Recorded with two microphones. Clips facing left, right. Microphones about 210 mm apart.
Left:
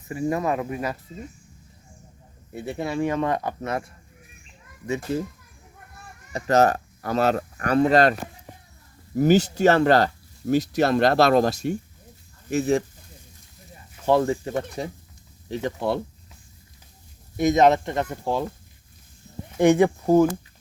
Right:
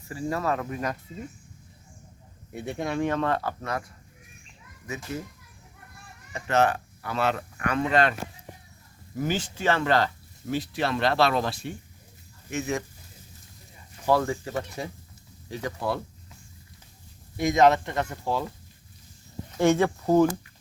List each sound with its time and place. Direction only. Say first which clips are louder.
0.1 s speech: left 4 dB; 20° left (ahead or behind)
2.5 s speech: left 2 dB; centre (ahead or behind); by 3.8 s 20° left (ahead or behind)
6.3 s speech: left 4 dB; 40° left (ahead or behind)
9.1 s speech: left 11 dB; 40° left (ahead or behind)
14.0 s speech: left 4 dB; 25° left (ahead or behind)
17.4 s speech: left 2 dB; 20° left (ahead or behind)
19.5 s speech: left 4 dB; 15° left (ahead or behind)